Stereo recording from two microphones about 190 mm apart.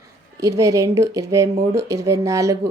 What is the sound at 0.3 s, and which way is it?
A woman's voice, 15° right (ahead or behind).